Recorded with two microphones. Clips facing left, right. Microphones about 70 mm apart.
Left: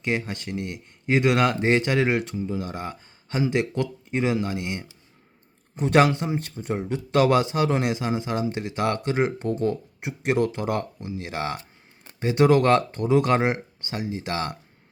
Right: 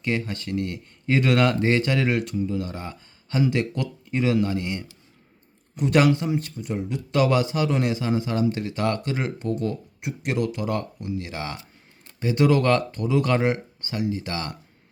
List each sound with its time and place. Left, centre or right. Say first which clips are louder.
0.0 s a man's voice: even; left